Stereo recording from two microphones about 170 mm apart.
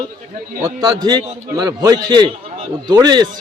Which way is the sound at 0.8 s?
20° right (ahead or behind).